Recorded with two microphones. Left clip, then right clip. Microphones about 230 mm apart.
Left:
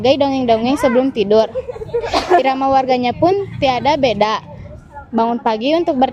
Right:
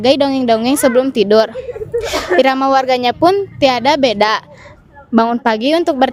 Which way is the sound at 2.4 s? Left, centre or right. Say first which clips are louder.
Right 7 dB; right.